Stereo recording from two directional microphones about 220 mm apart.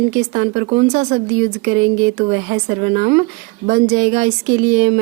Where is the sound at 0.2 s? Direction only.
30° right (ahead or behind).